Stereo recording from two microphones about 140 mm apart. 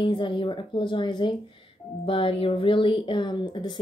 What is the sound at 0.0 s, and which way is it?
Speech, 35° left (ahead or behind).